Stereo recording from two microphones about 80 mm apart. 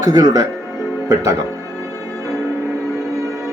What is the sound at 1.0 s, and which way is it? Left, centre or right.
Speech, right.